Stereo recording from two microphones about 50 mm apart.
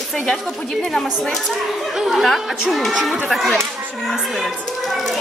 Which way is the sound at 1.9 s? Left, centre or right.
Centre.